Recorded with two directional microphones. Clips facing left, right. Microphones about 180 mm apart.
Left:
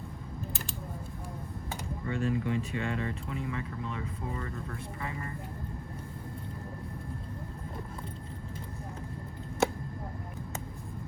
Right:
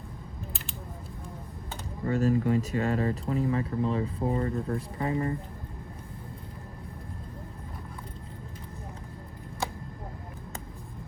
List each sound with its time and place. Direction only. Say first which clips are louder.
2.0 s speech: right 6 dB; 40° right (ahead or behind)